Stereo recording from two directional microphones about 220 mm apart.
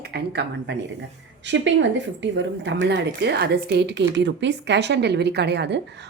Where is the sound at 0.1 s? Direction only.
50° right (ahead or behind).